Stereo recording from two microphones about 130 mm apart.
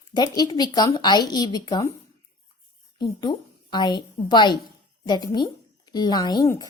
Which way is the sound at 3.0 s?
35° left (ahead or behind).